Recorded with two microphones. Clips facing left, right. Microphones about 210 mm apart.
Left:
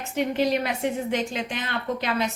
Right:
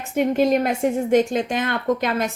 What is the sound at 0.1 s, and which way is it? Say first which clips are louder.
A woman's voice: right 6 dB; 50° right (ahead or behind).